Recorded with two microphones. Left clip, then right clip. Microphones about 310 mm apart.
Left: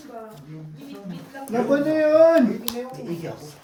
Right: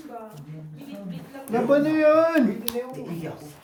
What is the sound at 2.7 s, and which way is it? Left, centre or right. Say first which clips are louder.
Speech: right 1 dB; centre.